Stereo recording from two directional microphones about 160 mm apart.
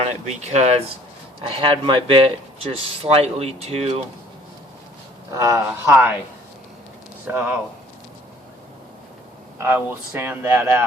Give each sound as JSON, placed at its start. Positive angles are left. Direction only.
{"t": 0.4, "sound": "speech", "side_deg": -45}
{"t": 1.4, "sound": "speech", "side_deg": -35}
{"t": 5.4, "sound": "speech", "side_deg": -20}
{"t": 7.3, "sound": "speech", "side_deg": -10}
{"t": 9.6, "sound": "speech", "side_deg": -15}